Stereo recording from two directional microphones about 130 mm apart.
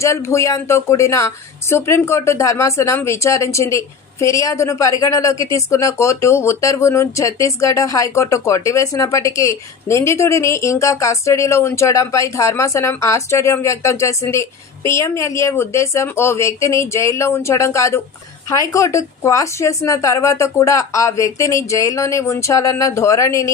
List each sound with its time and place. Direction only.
0.0 s speech: 20° left (ahead or behind)